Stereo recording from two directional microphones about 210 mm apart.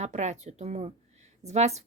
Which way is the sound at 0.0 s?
35° right (ahead or behind).